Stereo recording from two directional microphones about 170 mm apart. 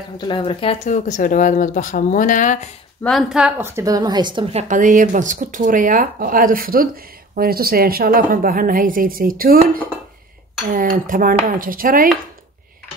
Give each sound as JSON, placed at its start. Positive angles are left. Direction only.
{"t": 0.2, "sound": "speech", "side_deg": 30}
{"t": 3.0, "sound": "a woman's voice", "side_deg": 0}